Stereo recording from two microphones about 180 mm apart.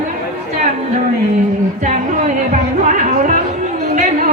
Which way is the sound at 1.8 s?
45° right (ahead or behind).